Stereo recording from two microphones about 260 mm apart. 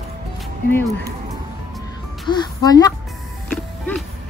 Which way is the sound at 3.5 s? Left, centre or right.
Centre.